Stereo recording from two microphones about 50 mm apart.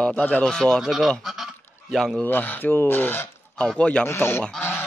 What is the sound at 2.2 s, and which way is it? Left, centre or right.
Speech, left.